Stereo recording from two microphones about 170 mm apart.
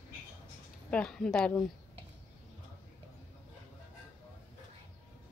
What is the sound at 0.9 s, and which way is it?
Speech, 5° left (ahead or behind).